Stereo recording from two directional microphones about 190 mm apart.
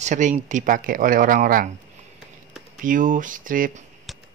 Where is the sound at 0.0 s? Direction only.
40° right (ahead or behind).